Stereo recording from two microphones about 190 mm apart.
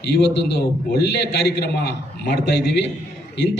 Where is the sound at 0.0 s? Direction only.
65° left (ahead or behind).